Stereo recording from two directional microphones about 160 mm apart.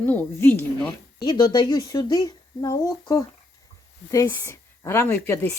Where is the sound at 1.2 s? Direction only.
30° left (ahead or behind).